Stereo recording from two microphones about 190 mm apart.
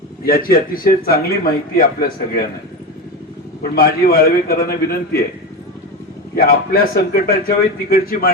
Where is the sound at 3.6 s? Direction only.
55° left (ahead or behind).